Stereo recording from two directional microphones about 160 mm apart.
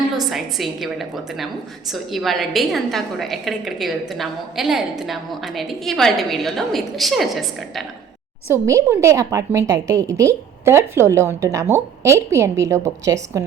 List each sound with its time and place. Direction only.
0.3 s a woman's voice: centre (ahead or behind)
8.5 s a woman's voice: 20° right (ahead or behind)